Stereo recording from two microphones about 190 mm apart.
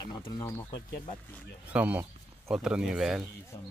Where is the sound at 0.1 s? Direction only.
15° left (ahead or behind).